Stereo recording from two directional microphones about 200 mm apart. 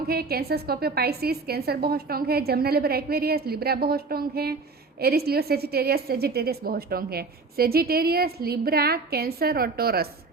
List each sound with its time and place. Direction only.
0.1 s a woman's voice: 50° right (ahead or behind)